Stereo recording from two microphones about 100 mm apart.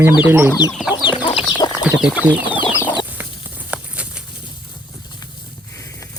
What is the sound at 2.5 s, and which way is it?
Chicken, 55° left (ahead or behind).